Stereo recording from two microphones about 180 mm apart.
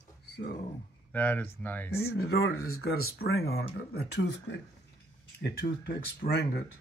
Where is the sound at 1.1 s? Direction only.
10° left (ahead or behind).